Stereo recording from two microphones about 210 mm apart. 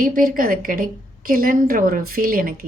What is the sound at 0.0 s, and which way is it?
Speech, 40° right (ahead or behind).